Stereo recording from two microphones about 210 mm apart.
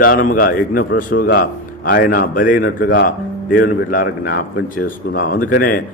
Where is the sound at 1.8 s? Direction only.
50° left (ahead or behind).